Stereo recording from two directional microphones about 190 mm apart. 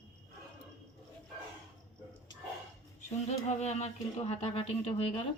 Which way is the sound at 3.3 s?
35° left (ahead or behind).